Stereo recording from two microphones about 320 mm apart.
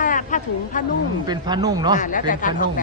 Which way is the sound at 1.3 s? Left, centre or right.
Centre.